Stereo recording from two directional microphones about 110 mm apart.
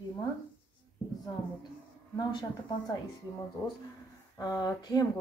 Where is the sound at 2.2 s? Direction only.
45° left (ahead or behind).